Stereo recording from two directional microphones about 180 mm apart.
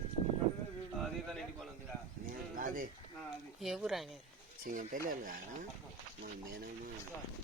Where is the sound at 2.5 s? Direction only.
50° right (ahead or behind).